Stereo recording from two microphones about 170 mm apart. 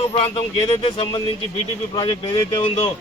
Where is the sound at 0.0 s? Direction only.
35° left (ahead or behind).